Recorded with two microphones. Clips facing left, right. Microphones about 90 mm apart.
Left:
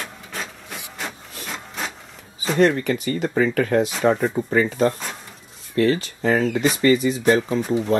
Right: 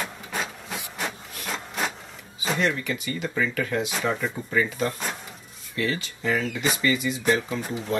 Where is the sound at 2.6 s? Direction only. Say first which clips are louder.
Left 11 dB; 45° left (ahead or behind).